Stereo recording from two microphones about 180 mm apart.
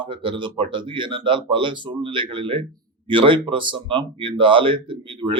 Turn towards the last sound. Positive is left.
turn(degrees=-30)  # may be behind; listen again after turning